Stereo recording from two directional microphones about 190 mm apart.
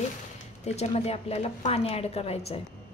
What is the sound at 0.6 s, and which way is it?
A woman's voice, 35° left (ahead or behind).